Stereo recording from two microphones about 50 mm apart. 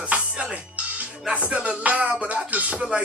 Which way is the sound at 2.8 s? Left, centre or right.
Centre.